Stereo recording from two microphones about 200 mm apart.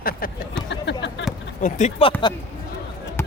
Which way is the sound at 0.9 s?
60° left (ahead or behind).